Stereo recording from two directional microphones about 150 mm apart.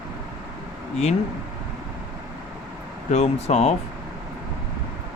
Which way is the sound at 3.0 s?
50° left (ahead or behind).